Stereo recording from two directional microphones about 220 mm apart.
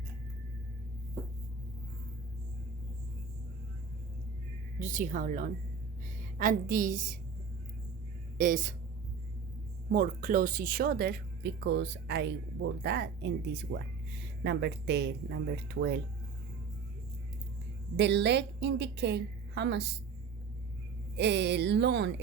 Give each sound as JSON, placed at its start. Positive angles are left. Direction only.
{"t": 4.8, "sound": "a woman's voice", "side_deg": -35}
{"t": 8.4, "sound": "a woman's voice", "side_deg": -35}
{"t": 9.9, "sound": "speech", "side_deg": -35}
{"t": 17.9, "sound": "speech", "side_deg": -50}
{"t": 21.2, "sound": "speech", "side_deg": -50}